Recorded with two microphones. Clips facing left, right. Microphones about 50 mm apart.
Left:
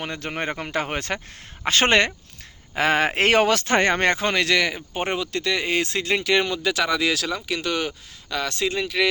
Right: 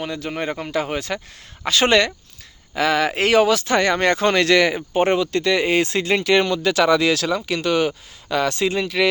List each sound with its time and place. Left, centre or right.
0.0 s speech: left
3.8 s speech: left
4.4 s speech: centre